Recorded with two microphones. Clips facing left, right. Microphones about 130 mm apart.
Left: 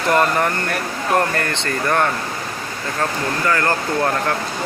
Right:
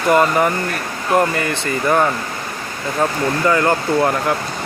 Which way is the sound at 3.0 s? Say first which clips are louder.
Right 4 dB; 15° right (ahead or behind).